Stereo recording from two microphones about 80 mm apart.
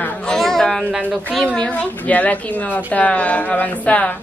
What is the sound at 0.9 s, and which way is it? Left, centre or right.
Speech, centre.